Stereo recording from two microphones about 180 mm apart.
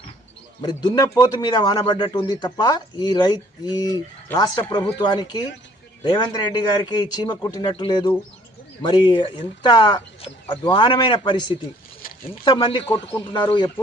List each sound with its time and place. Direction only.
0.6 s speech: 25° left (ahead or behind)